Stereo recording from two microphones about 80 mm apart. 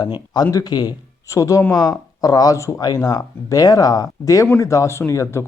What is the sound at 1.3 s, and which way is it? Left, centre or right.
Speech, left.